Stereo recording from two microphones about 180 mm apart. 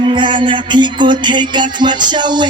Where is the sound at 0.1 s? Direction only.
25° right (ahead or behind).